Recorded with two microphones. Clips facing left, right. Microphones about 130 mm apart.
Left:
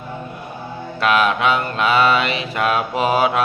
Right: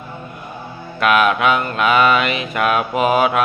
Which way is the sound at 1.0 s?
30° left (ahead or behind).